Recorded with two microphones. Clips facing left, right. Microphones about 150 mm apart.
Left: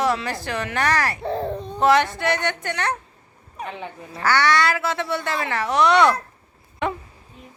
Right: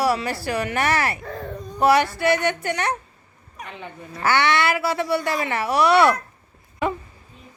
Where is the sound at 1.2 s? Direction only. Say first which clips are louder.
Left 7 dB; 30° left (ahead or behind).